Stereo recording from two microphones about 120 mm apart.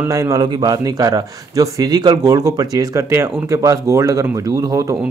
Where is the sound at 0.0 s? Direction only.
25° right (ahead or behind).